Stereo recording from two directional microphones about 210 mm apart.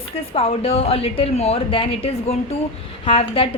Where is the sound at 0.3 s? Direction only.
30° left (ahead or behind).